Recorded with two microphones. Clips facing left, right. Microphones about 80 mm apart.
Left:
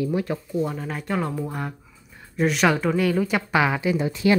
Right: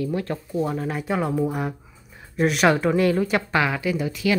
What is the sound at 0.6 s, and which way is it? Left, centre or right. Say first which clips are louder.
Speech: right 2 dB; centre.